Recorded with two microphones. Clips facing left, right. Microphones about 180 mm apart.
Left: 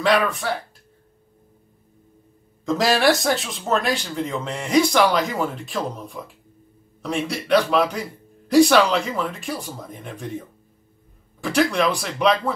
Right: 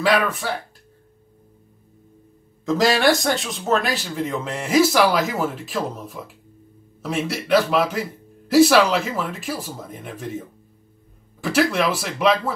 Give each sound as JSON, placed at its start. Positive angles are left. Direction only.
{"t": 0.0, "sound": "speech", "side_deg": 0}
{"t": 2.6, "sound": "speech", "side_deg": 0}
{"t": 11.4, "sound": "speech", "side_deg": -5}